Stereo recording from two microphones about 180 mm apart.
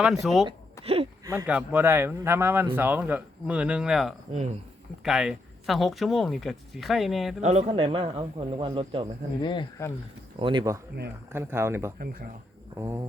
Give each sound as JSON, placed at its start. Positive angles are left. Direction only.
{"t": 0.4, "sound": "a sound", "side_deg": -30}
{"t": 1.2, "sound": "speech", "side_deg": -20}
{"t": 1.5, "sound": "speech", "side_deg": -10}
{"t": 4.3, "sound": "a man's voice", "side_deg": -35}
{"t": 5.0, "sound": "speech", "side_deg": -5}
{"t": 7.4, "sound": "a man's voice", "side_deg": -40}
{"t": 9.4, "sound": "speech", "side_deg": 25}
{"t": 10.3, "sound": "speech", "side_deg": -25}
{"t": 11.3, "sound": "speech", "side_deg": -15}
{"t": 11.9, "sound": "speech", "side_deg": -55}
{"t": 12.7, "sound": "speech", "side_deg": -15}